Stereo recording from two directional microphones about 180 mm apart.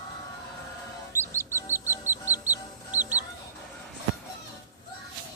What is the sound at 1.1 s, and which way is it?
Music, 15° right (ahead or behind).